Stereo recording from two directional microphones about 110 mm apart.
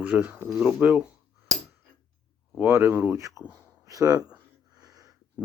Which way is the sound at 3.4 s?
15° right (ahead or behind).